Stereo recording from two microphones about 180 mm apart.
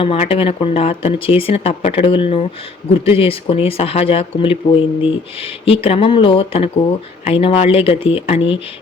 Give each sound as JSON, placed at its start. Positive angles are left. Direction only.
{"t": 0.0, "sound": "speech", "side_deg": 30}